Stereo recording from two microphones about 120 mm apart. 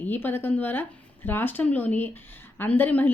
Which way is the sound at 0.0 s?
15° left (ahead or behind).